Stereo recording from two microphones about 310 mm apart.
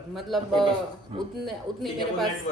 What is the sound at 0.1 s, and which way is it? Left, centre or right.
Speech, centre.